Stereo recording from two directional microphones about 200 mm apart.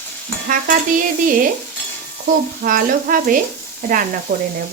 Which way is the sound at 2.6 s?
45° right (ahead or behind).